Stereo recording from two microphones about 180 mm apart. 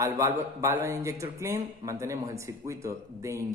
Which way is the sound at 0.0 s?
15° right (ahead or behind).